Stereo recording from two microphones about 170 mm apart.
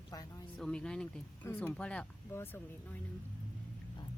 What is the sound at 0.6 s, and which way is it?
Speech, 5° left (ahead or behind).